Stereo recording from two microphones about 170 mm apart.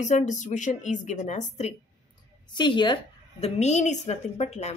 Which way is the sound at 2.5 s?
25° left (ahead or behind).